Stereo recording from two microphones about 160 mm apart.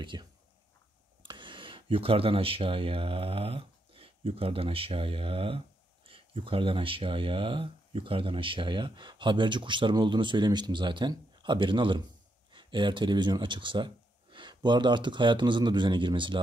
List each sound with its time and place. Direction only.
0.0 s speech: 30° right (ahead or behind)